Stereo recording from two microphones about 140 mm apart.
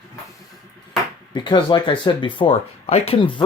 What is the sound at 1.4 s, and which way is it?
Speech, 35° left (ahead or behind).